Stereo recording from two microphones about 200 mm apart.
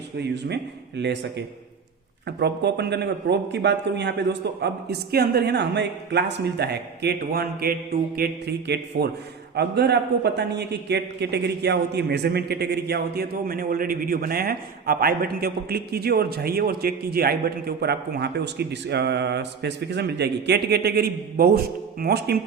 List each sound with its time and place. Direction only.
0.2 s a man's voice: 55° right (ahead or behind)
2.2 s a man's voice: 55° right (ahead or behind)